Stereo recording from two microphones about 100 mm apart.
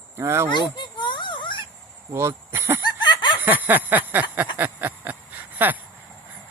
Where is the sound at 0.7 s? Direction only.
50° left (ahead or behind).